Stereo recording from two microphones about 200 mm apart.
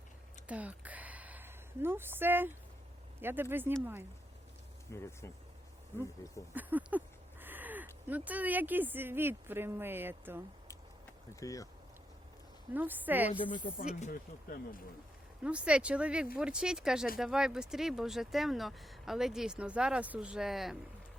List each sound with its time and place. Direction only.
0.4 s a sound: 5° right (ahead or behind)
3.2 s speech: 10° right (ahead or behind)
4.9 s speech: 15° left (ahead or behind)
6.5 s a sound: 10° right (ahead or behind)
8.0 s speech: 10° right (ahead or behind)
11.3 s speech: 15° left (ahead or behind)
12.7 s speech: 10° right (ahead or behind)
13.3 s speech: 25° left (ahead or behind)
14.0 s speech: 45° left (ahead or behind)
15.4 s speech: 5° right (ahead or behind)